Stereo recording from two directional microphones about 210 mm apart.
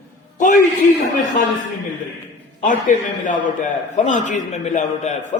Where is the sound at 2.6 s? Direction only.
40° left (ahead or behind).